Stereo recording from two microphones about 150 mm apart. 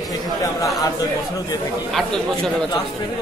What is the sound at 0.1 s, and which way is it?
Chatter, 25° left (ahead or behind).